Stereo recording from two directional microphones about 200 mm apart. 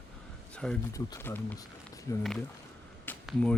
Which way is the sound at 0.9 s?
15° left (ahead or behind).